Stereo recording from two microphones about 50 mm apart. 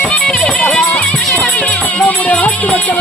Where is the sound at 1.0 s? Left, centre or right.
Left.